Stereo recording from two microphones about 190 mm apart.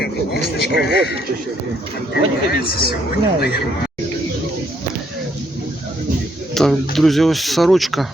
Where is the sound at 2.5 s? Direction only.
55° left (ahead or behind).